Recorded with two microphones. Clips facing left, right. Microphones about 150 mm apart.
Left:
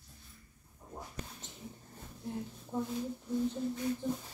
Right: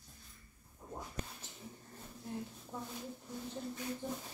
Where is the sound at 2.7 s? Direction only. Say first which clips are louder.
Left 9 dB; 15° left (ahead or behind).